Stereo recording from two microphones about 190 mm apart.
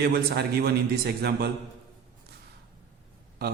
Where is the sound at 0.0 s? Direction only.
55° right (ahead or behind).